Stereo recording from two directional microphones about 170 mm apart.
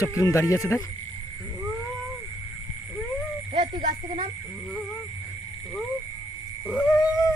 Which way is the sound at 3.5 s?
45° right (ahead or behind).